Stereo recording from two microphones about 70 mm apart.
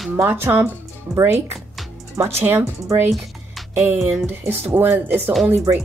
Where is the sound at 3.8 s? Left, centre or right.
Right.